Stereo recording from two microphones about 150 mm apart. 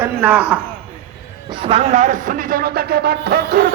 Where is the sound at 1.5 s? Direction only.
35° right (ahead or behind).